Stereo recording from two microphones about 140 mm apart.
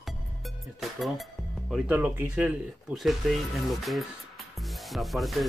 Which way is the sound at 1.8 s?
15° right (ahead or behind).